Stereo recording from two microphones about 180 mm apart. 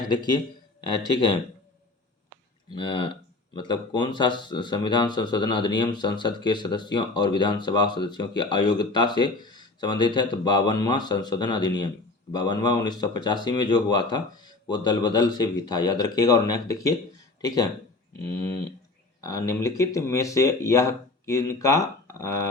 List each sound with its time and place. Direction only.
0.1 s speech: 25° left (ahead or behind)
2.7 s speech: 30° left (ahead or behind)
19.2 s speech: 20° left (ahead or behind)